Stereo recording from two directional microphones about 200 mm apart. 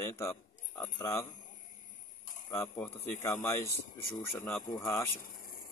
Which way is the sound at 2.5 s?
15° left (ahead or behind).